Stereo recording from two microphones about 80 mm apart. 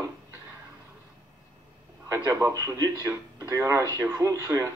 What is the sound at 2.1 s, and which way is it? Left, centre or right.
A man's voice, right.